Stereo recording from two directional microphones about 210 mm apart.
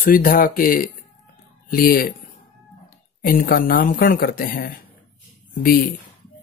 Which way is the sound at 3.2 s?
45° left (ahead or behind).